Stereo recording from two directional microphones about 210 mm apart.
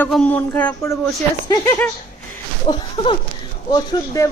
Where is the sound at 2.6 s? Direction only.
25° left (ahead or behind).